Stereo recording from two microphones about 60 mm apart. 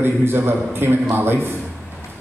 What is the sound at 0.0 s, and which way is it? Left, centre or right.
A man's voice, right.